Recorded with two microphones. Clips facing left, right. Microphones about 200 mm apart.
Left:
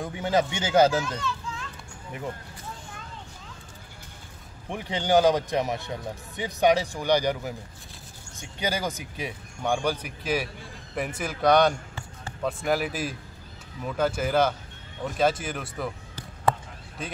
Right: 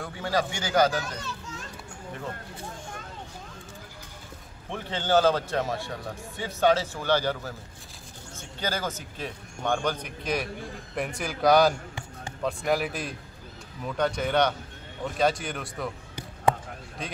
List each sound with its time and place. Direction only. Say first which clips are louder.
0.0 s speech: left 3 dB; 20° left (ahead or behind)
1.0 s children playing: left 5 dB; 40° right (ahead or behind)
4.6 s speech: left 2 dB; 15° left (ahead or behind)